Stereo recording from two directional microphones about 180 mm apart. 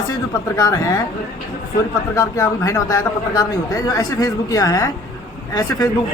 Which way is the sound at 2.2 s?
15° left (ahead or behind).